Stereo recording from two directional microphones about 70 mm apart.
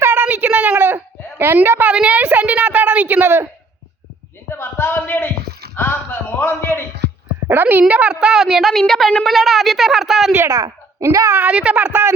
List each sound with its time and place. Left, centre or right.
0.0 s a sound: right
0.8 s baby cry: right
1.9 s a woman's voice: centre
4.4 s a man's voice: left
7.4 s a child's voice: right
7.9 s a woman's voice: centre
11.0 s a woman's voice: right
11.3 s speech: centre